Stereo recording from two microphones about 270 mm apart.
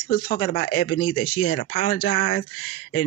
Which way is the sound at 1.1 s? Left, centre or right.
Left.